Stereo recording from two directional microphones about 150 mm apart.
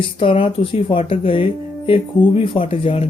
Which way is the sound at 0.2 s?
35° left (ahead or behind).